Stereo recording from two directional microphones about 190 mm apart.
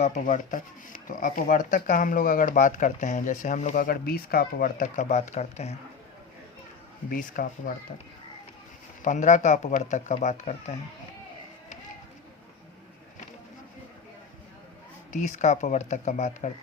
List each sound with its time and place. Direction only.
0.0 s speech: 40° left (ahead or behind)
7.1 s speech: 45° left (ahead or behind)
9.0 s speech: 40° left (ahead or behind)
15.1 s speech: 40° left (ahead or behind)